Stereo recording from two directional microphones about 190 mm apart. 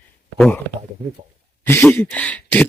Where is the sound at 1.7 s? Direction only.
10° left (ahead or behind).